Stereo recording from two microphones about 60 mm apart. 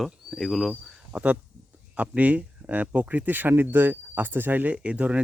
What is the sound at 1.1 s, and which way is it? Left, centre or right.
Speech, right.